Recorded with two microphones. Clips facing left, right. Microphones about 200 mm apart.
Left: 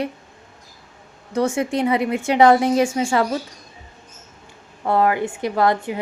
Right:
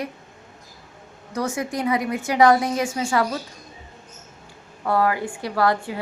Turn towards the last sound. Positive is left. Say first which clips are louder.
# left 3 dB
turn(degrees=20)  # may be behind; listen again after turning